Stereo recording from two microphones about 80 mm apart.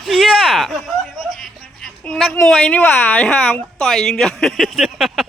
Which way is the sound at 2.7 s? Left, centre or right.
Left.